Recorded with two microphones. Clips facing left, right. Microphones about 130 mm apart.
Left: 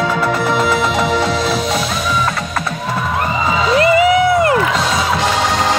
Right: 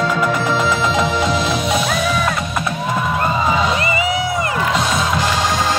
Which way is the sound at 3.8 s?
70° left (ahead or behind).